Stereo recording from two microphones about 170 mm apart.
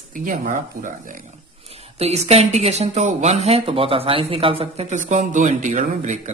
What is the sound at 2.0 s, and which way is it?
Speech, 40° right (ahead or behind).